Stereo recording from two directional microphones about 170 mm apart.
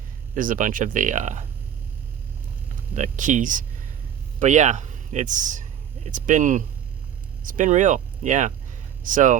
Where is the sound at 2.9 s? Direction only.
45° right (ahead or behind).